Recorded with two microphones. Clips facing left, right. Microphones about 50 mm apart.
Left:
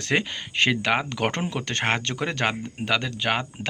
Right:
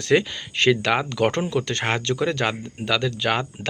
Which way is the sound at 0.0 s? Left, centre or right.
Left.